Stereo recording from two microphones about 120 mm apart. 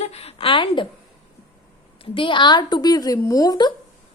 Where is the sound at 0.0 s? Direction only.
55° left (ahead or behind).